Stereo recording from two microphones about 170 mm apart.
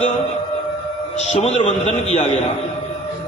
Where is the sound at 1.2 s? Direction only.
40° left (ahead or behind).